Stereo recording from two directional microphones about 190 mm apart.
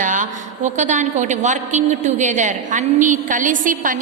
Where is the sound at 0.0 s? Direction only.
40° right (ahead or behind).